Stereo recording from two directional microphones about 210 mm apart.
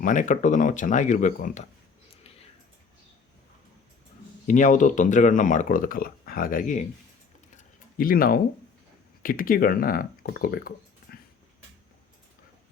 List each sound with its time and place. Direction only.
0.0 s speech: 35° left (ahead or behind)
4.4 s speech: 35° left (ahead or behind)
7.5 s a sound: 40° left (ahead or behind)
9.2 s speech: 40° left (ahead or behind)